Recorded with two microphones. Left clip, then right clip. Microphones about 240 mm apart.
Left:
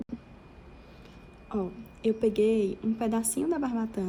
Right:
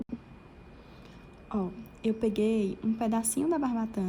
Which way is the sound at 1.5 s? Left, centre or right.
Right.